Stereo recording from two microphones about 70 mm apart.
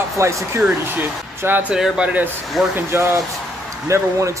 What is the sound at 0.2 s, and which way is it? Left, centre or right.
Speech, right.